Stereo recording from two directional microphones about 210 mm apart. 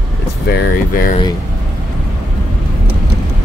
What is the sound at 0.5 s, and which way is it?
Speech, 45° left (ahead or behind).